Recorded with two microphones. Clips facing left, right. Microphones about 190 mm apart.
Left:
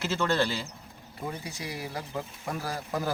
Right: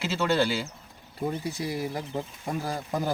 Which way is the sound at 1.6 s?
25° right (ahead or behind).